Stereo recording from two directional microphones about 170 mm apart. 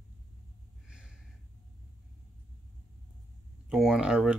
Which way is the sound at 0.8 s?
5° right (ahead or behind).